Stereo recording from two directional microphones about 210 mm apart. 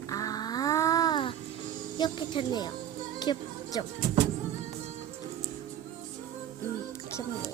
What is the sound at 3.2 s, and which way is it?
Music, 20° left (ahead or behind).